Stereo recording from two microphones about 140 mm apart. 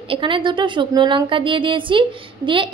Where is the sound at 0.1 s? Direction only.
35° right (ahead or behind).